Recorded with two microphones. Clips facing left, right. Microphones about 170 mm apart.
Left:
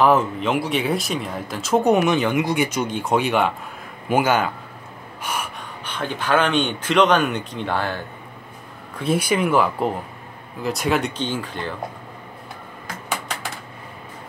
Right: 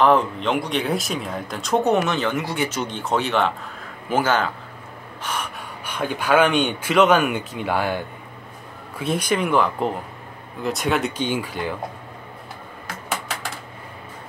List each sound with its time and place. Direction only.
0.0 s speech: 5° left (ahead or behind)
1.9 s speech: 15° left (ahead or behind)
5.2 s gasp: 10° left (ahead or behind)
5.9 s speech: 10° right (ahead or behind)
8.9 s speech: centre (ahead or behind)
11.1 s speech: 10° right (ahead or behind)